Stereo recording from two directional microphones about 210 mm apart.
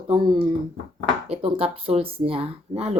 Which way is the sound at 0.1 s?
20° right (ahead or behind).